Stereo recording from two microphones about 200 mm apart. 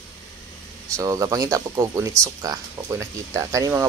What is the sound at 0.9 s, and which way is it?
Speech, 15° right (ahead or behind).